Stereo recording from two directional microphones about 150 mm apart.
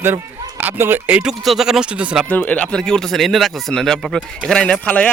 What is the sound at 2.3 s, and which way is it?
Speech, 10° left (ahead or behind).